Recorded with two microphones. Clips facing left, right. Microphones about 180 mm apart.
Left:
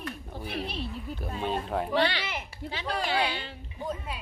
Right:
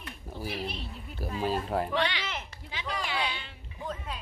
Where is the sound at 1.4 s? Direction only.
Centre (ahead or behind).